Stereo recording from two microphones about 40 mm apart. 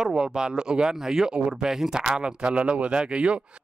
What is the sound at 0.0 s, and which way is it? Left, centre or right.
Speech, centre.